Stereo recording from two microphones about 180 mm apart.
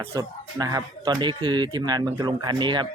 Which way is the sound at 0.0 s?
20° right (ahead or behind).